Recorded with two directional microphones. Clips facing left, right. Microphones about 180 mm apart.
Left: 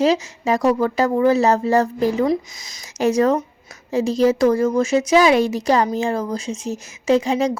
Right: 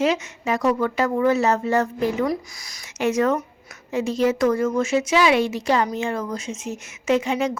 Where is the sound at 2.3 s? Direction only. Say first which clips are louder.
Left 5 dB; 20° left (ahead or behind).